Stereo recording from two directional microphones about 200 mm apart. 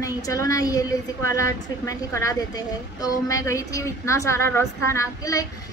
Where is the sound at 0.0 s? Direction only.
15° left (ahead or behind).